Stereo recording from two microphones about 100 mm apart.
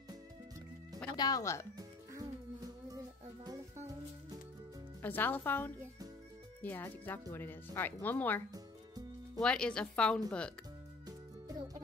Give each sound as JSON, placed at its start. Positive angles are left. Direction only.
{"t": 1.1, "sound": "speech", "side_deg": 40}
{"t": 1.8, "sound": "music", "side_deg": -35}
{"t": 5.0, "sound": "speech", "side_deg": 20}
{"t": 9.4, "sound": "speech", "side_deg": 10}
{"t": 11.1, "sound": "music", "side_deg": -35}